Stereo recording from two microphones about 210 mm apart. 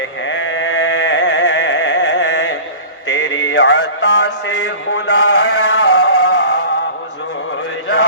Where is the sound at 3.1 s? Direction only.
60° left (ahead or behind).